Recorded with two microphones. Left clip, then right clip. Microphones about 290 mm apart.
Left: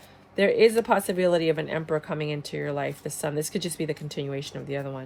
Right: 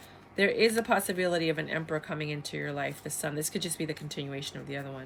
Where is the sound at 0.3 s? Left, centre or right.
Centre.